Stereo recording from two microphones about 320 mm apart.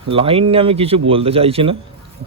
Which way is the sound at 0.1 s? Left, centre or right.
Centre.